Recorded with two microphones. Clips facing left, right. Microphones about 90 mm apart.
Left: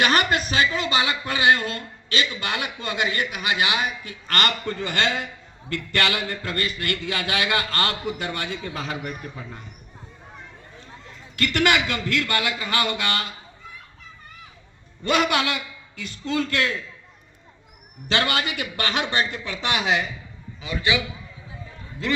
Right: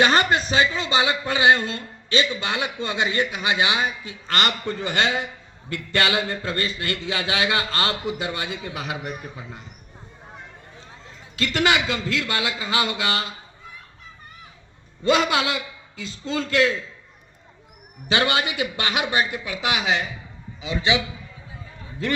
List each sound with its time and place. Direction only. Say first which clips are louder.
0.0 s a man's voice: right 2 dB; 25° right (ahead or behind)
11.3 s a man's voice: even; 20° right (ahead or behind)
15.0 s a man's voice: right 1 dB; 25° right (ahead or behind)
18.1 s a man's voice: right 2 dB; 20° right (ahead or behind); by 20.1 s centre (ahead or behind)
20.6 s a man's voice: right 2 dB; 20° right (ahead or behind)